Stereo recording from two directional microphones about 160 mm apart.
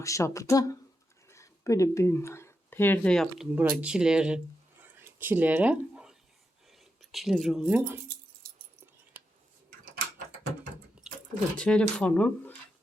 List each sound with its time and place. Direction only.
0.0 s speech: 20° left (ahead or behind)
3.5 s speech: 10° right (ahead or behind)
4.8 s a sound: 10° right (ahead or behind)
7.1 s speech: centre (ahead or behind)
11.5 s speech: 5° left (ahead or behind)